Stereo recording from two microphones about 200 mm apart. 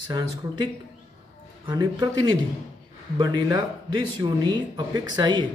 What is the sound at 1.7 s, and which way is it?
Speech, 20° right (ahead or behind).